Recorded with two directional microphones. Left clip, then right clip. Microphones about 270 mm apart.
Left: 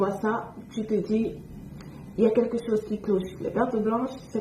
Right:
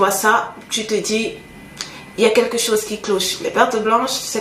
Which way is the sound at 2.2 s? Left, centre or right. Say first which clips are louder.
Right 8 dB; centre.